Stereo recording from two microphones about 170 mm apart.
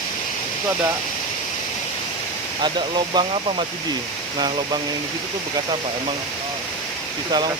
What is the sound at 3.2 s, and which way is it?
Speech, 25° right (ahead or behind).